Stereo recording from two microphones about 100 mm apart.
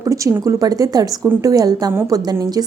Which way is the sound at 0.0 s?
35° right (ahead or behind).